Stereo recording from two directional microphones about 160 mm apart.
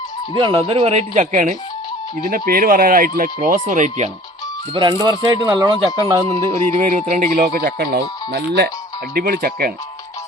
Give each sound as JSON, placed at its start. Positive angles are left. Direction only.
{"t": 0.3, "sound": "speech", "side_deg": -30}
{"t": 2.3, "sound": "speech", "side_deg": -60}
{"t": 4.7, "sound": "speech", "side_deg": -25}
{"t": 6.7, "sound": "speech", "side_deg": -45}
{"t": 9.1, "sound": "speech", "side_deg": -70}